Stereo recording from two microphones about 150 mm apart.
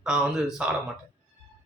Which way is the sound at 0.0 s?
5° right (ahead or behind).